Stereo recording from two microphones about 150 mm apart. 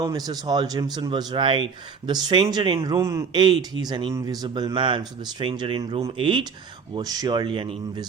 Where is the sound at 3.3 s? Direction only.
30° right (ahead or behind).